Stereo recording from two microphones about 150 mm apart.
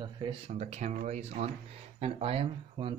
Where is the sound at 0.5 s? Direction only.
50° right (ahead or behind).